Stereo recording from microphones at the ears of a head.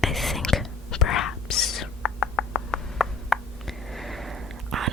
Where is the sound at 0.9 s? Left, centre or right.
Left.